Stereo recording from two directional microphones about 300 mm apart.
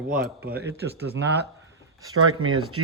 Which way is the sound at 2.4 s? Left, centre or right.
Right.